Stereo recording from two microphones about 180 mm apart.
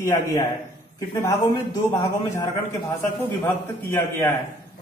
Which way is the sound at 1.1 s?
15° left (ahead or behind).